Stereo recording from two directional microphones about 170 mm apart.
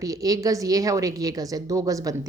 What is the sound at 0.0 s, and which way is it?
A woman's voice, 20° right (ahead or behind).